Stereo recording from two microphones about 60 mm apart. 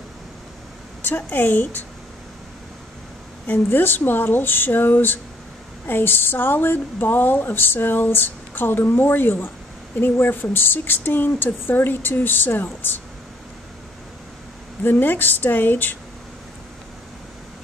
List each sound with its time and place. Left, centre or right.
1.0 s a woman's voice: left
3.4 s a woman's voice: left
14.8 s a woman's voice: left